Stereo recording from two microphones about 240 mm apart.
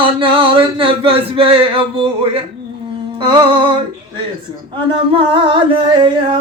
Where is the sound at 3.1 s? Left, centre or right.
Right.